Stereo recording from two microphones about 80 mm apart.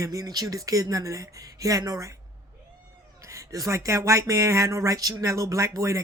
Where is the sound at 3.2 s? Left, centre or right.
Right.